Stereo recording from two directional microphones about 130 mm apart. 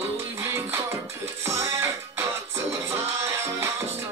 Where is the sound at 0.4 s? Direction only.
20° right (ahead or behind).